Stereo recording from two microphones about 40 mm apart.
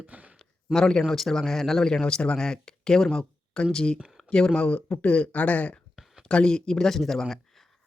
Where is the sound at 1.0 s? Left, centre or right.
Centre.